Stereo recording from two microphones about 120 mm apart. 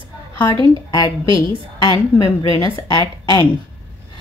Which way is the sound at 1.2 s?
45° right (ahead or behind).